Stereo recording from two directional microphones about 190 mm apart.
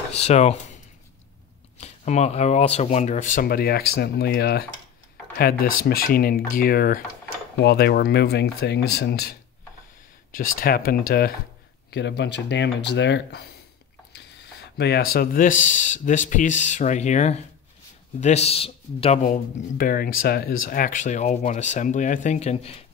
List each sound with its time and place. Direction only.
0.1 s speech: 35° left (ahead or behind)
1.8 s speech: 35° left (ahead or behind); by 9.4 s 55° left (ahead or behind)
10.6 s speech: 50° left (ahead or behind); by 22.8 s 30° left (ahead or behind)